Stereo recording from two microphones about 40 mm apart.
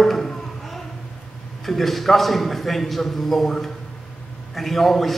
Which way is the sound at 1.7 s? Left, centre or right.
Centre.